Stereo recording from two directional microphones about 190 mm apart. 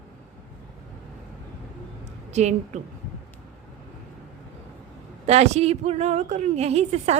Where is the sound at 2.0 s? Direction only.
35° right (ahead or behind).